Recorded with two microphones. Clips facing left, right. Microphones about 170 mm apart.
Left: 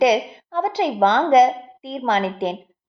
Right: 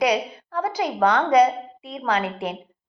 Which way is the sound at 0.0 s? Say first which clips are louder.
Left 5 dB; 30° left (ahead or behind).